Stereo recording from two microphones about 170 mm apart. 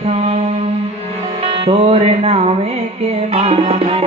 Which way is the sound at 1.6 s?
35° right (ahead or behind).